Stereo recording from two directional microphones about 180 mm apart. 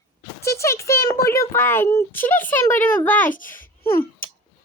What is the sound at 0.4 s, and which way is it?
Speech, 15° left (ahead or behind).